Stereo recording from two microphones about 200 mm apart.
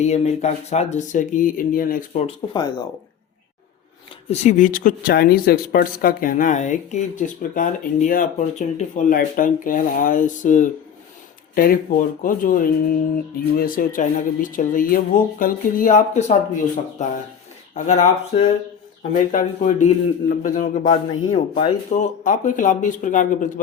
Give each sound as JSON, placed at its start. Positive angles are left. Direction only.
{"t": 0.0, "sound": "speech", "side_deg": 35}
{"t": 2.2, "sound": "speech", "side_deg": 20}
{"t": 4.3, "sound": "speech", "side_deg": 40}